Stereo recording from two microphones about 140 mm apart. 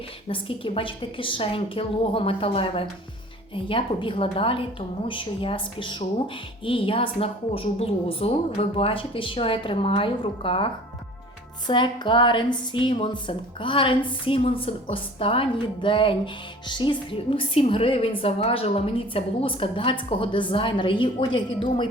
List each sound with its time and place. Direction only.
0.3 s a woman's voice: 40° left (ahead or behind)
11.7 s a woman's voice: 35° left (ahead or behind)